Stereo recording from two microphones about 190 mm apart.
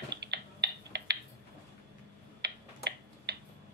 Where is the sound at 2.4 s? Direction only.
60° right (ahead or behind).